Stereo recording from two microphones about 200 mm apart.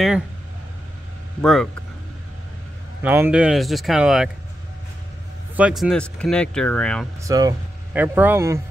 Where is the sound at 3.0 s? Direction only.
10° right (ahead or behind).